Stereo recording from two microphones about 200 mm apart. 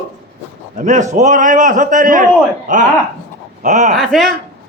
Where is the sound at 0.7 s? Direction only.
35° right (ahead or behind).